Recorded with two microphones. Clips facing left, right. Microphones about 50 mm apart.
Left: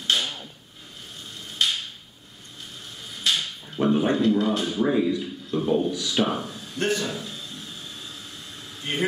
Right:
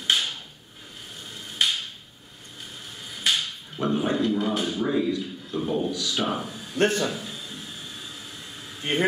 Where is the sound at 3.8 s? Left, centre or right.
Left.